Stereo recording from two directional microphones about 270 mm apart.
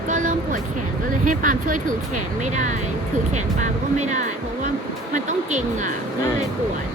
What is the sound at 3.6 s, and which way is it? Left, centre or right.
Music, right.